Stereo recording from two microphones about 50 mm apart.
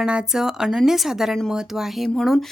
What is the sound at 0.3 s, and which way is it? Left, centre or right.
A woman's voice, centre.